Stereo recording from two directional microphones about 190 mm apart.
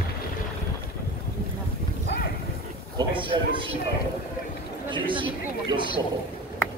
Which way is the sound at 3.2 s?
25° right (ahead or behind).